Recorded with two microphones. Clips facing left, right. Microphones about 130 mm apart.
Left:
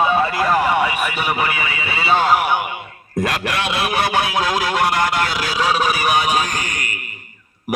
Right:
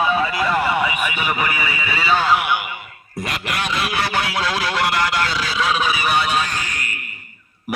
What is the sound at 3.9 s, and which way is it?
Speech, 20° left (ahead or behind).